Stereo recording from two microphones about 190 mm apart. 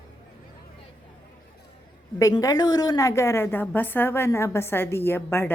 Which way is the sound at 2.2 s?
20° left (ahead or behind).